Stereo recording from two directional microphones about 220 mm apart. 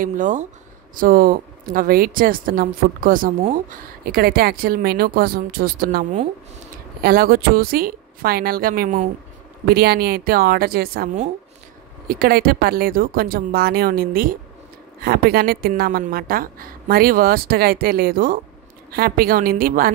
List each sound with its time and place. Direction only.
0.0 s a woman's voice: 35° right (ahead or behind)
12.1 s a woman's voice: 40° right (ahead or behind)